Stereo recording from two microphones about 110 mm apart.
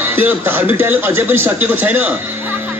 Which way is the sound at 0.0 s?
20° right (ahead or behind).